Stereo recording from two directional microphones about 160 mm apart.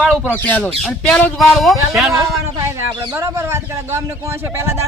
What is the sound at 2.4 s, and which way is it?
A man's voice, 15° right (ahead or behind).